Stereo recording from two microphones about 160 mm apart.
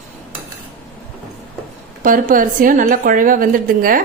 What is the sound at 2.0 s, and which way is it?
Speech, 60° right (ahead or behind).